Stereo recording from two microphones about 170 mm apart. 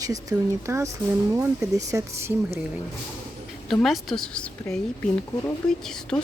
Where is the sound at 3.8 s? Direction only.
Centre (ahead or behind).